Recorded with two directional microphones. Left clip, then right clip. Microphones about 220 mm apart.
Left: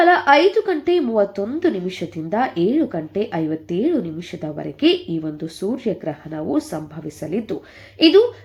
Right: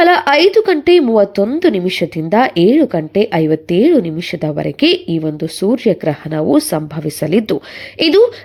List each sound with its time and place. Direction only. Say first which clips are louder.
0.0 s a woman's voice: right 4 dB; 30° right (ahead or behind)